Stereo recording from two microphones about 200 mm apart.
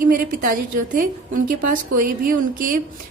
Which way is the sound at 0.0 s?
45° right (ahead or behind).